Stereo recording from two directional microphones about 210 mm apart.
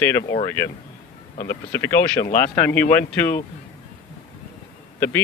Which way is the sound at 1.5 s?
10° left (ahead or behind).